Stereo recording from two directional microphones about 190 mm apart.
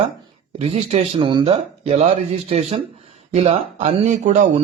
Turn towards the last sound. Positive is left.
turn(degrees=-40)  # may be behind; listen again after turning